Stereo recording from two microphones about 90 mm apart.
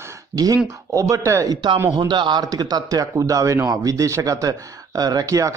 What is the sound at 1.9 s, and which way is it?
Speech, 55° right (ahead or behind).